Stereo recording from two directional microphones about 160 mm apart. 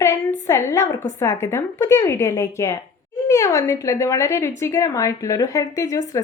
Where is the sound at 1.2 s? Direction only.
15° left (ahead or behind).